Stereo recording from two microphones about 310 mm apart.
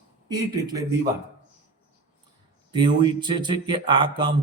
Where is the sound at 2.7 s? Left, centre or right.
Centre.